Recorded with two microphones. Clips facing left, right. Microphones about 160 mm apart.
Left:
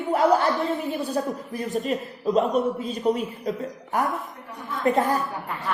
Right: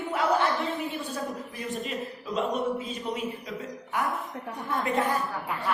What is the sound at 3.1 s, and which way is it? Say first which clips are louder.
Speech: left 11 dB; 40° left (ahead or behind).